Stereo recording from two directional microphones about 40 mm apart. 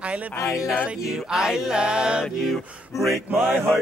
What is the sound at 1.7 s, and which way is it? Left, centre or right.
Music, right.